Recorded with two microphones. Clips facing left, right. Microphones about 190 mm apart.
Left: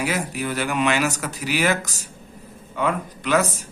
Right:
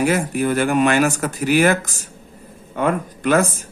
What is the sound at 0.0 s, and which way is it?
Speech, 50° right (ahead or behind).